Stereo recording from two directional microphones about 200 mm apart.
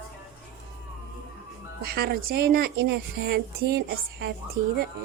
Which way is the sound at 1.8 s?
50° right (ahead or behind).